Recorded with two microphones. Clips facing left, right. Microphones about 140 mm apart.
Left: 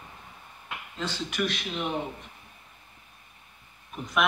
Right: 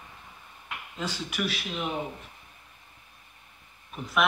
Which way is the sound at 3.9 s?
Centre (ahead or behind).